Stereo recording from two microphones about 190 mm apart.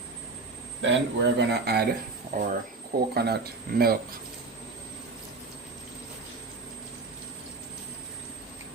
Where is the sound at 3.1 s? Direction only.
55° right (ahead or behind).